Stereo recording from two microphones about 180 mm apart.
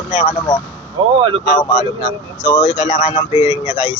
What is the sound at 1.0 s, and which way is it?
Speech, 25° right (ahead or behind).